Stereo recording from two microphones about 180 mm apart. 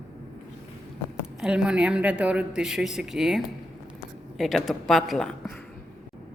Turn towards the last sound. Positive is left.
turn(degrees=0)  # may be behind; listen again after turning